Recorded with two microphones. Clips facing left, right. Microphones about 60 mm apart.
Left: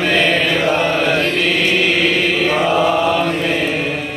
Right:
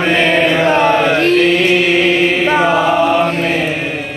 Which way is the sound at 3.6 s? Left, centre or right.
Centre.